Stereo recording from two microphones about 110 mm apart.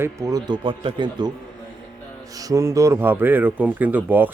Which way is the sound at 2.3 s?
30° right (ahead or behind).